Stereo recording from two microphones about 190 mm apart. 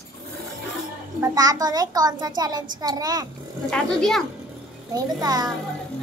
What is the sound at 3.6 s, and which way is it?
Speech, 5° left (ahead or behind).